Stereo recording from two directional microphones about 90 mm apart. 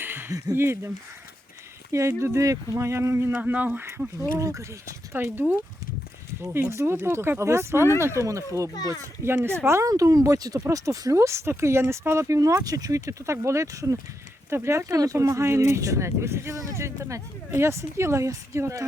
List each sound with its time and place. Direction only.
0.0 s a sound: 25° right (ahead or behind)
0.3 s speech: 40° right (ahead or behind)
0.5 s speech: 30° right (ahead or behind)
1.9 s speech: 35° right (ahead or behind)
3.3 s speech: 20° right (ahead or behind)
4.2 s speech: 35° right (ahead or behind)
8.7 s a child's voice: 45° left (ahead or behind)
9.2 s speech: 25° right (ahead or behind)
9.9 s speech: 40° right (ahead or behind)